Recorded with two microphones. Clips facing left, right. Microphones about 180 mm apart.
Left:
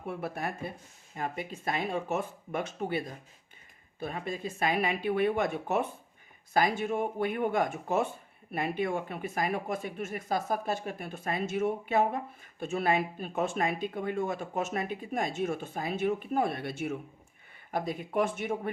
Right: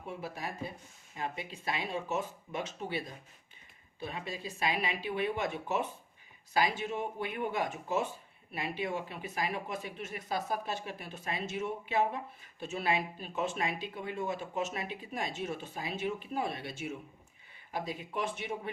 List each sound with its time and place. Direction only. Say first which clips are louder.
0.1 s speech: left 5 dB; 60° left (ahead or behind)
1.1 s speech: left 3 dB; 50° left (ahead or behind)